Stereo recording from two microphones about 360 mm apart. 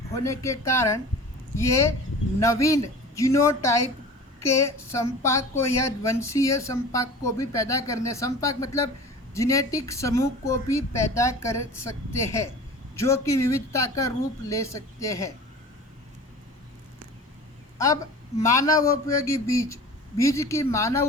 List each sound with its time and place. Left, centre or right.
0.3 s a woman's voice: centre
17.7 s a woman's voice: centre